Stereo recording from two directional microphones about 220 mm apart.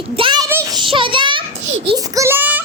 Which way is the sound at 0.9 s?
25° right (ahead or behind).